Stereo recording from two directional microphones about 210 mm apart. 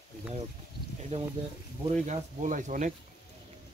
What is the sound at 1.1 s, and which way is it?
Speech, 30° right (ahead or behind).